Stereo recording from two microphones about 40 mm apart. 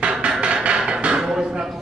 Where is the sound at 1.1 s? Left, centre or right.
Centre.